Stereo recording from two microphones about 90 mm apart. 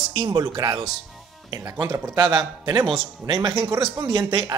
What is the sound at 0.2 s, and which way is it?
Speech, 45° right (ahead or behind).